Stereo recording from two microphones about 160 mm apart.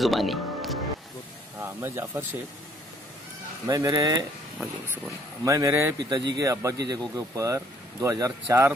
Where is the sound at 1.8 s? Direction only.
15° right (ahead or behind).